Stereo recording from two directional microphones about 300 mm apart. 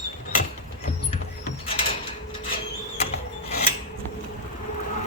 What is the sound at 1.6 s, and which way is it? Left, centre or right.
Mechanisms, centre.